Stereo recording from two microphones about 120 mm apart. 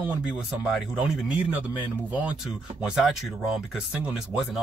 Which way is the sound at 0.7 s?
5° right (ahead or behind).